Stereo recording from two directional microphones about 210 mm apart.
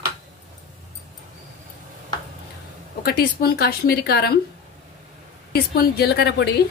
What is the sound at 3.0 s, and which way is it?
Speech, 45° left (ahead or behind).